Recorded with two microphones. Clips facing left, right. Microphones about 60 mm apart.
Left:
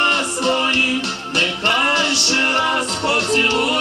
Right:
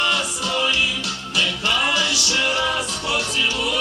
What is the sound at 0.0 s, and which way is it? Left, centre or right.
Music, left.